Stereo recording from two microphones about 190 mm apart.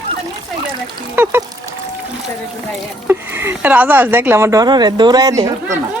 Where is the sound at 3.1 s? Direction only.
10° right (ahead or behind).